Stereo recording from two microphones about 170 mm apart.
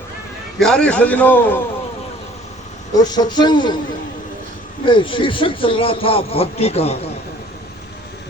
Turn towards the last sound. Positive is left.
turn(degrees=35)  # may be behind; listen again after turning